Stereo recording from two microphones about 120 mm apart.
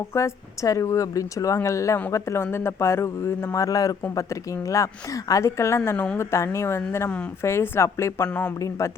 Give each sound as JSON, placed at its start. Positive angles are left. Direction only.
{"t": 0.1, "sound": "a woman's voice", "side_deg": 25}
{"t": 8.3, "sound": "speech", "side_deg": 10}
{"t": 8.5, "sound": "a woman's voice", "side_deg": 25}